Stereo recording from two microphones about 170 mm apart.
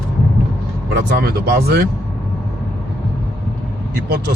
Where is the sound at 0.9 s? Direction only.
70° right (ahead or behind).